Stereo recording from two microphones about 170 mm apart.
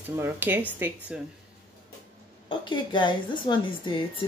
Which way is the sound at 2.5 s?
30° left (ahead or behind).